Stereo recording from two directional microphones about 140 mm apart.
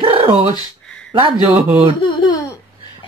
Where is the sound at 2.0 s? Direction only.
30° left (ahead or behind).